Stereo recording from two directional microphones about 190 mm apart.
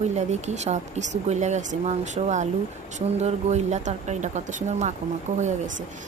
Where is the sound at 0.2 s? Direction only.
35° right (ahead or behind).